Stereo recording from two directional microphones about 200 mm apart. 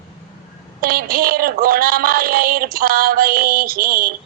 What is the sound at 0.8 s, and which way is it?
Synthetic singing, 45° right (ahead or behind).